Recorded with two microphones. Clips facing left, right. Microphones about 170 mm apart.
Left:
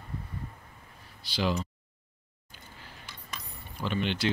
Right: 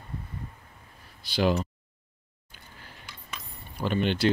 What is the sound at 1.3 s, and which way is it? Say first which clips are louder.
Speech: right 5 dB; 55° right (ahead or behind).